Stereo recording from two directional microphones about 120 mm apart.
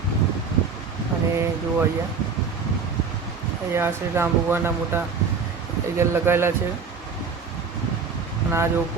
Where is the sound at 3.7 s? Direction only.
20° right (ahead or behind).